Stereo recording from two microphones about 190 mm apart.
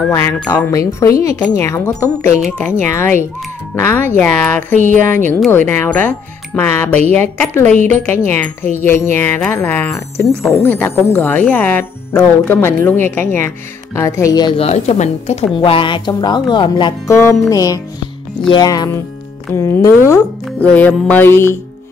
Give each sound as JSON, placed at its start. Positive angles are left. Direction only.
{"t": 0.1, "sound": "speech", "side_deg": 15}
{"t": 4.7, "sound": "speech", "side_deg": -40}
{"t": 5.5, "sound": "speech", "side_deg": 10}
{"t": 14.6, "sound": "a woman's voice", "side_deg": 35}